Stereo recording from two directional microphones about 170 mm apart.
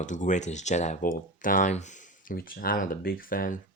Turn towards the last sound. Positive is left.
turn(degrees=55)  # may be behind; listen again after turning